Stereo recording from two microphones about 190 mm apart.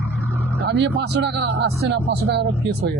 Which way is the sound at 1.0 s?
65° right (ahead or behind).